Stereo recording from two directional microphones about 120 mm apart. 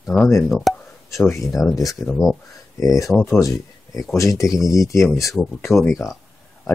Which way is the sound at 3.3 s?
25° left (ahead or behind).